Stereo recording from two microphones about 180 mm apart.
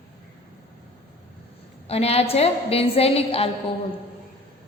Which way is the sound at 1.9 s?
35° left (ahead or behind).